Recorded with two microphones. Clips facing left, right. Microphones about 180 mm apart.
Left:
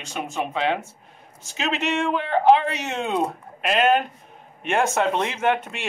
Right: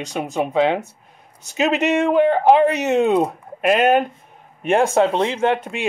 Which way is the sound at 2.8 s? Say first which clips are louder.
Right 10 dB; 15° right (ahead or behind).